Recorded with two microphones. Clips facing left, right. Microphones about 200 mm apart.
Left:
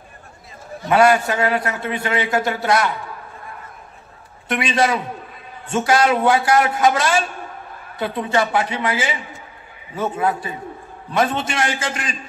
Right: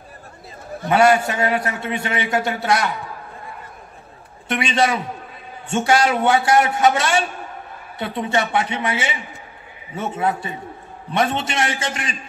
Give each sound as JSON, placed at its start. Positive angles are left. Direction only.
{"t": 0.8, "sound": "a man's voice", "side_deg": -25}
{"t": 4.5, "sound": "a man's voice", "side_deg": -25}